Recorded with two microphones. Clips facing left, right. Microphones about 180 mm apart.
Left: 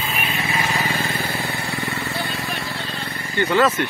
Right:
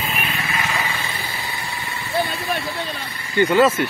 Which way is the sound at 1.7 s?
70° left (ahead or behind).